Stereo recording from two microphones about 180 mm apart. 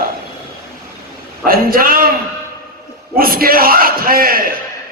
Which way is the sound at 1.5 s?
55° right (ahead or behind).